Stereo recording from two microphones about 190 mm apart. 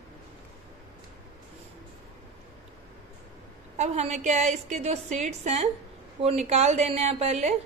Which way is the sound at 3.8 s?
35° right (ahead or behind).